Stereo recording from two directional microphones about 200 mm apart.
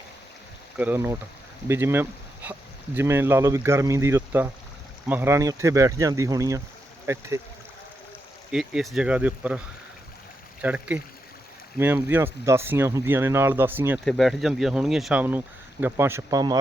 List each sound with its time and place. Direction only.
0.8 s speech: 10° right (ahead or behind)
8.5 s speech: centre (ahead or behind)
10.6 s speech: 5° right (ahead or behind)
14.0 s speech: centre (ahead or behind); by 16.6 s 20° right (ahead or behind)